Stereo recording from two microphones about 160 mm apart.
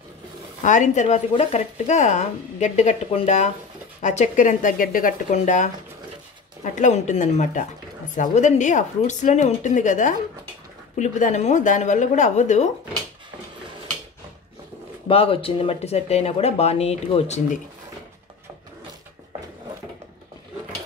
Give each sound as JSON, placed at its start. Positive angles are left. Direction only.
{"t": 0.6, "sound": "speech", "side_deg": 50}
{"t": 15.0, "sound": "speech", "side_deg": 35}